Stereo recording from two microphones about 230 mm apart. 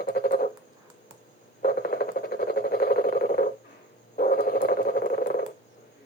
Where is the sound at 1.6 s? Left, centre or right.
Left.